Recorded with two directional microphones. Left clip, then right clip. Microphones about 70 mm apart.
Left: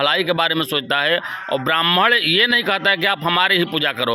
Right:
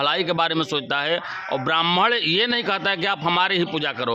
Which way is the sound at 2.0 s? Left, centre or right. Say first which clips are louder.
Left 5 dB; left.